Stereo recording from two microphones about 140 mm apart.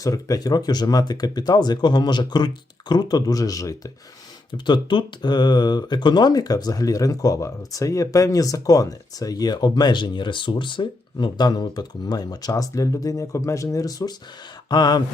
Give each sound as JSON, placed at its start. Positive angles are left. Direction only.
{"t": 0.0, "sound": "speech", "side_deg": 25}